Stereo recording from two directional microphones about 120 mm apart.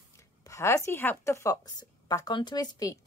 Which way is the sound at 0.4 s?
25° left (ahead or behind).